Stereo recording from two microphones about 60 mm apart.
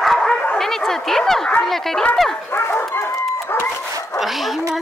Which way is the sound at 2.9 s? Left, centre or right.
Left.